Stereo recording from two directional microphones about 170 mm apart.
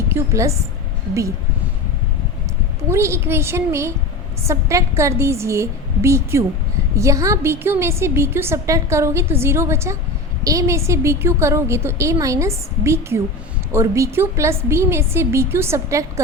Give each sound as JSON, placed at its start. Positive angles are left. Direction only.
{"t": 0.1, "sound": "a woman's voice", "side_deg": -15}
{"t": 2.9, "sound": "a woman's voice", "side_deg": -15}